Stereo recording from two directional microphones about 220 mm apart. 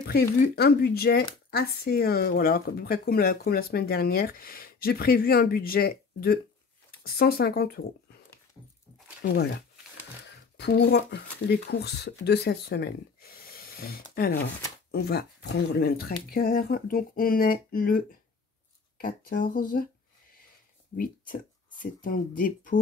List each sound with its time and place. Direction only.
0.0 s speech: 45° left (ahead or behind)
9.2 s speech: 50° left (ahead or behind)
20.9 s speech: 40° left (ahead or behind)